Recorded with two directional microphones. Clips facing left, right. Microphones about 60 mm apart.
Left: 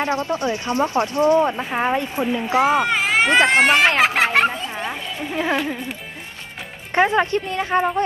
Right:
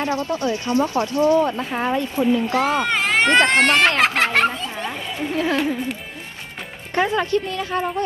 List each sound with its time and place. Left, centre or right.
0.0 s speech: left; by 5.6 s centre
6.9 s a woman's voice: left